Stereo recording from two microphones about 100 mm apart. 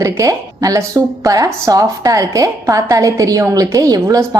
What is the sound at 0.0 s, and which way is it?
A woman's voice, 30° right (ahead or behind).